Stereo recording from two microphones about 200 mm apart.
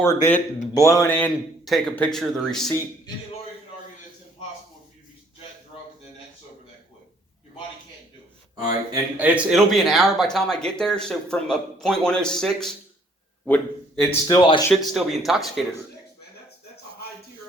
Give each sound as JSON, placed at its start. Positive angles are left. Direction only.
{"t": 0.0, "sound": "speech", "side_deg": 15}
{"t": 8.9, "sound": "a man's voice", "side_deg": -10}
{"t": 14.3, "sound": "speech", "side_deg": 20}
{"t": 14.7, "sound": "speech", "side_deg": 0}